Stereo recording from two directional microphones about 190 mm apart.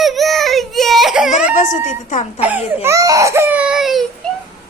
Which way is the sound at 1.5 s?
40° left (ahead or behind).